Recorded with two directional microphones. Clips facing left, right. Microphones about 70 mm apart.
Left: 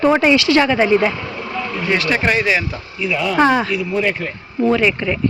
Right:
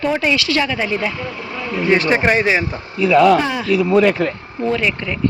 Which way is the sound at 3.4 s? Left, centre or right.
Left.